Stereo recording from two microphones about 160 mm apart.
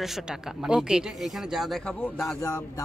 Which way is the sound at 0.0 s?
5° right (ahead or behind).